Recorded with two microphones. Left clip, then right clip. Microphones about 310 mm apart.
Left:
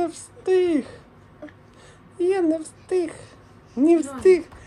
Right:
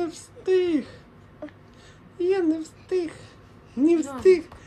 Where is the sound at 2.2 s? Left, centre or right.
Centre.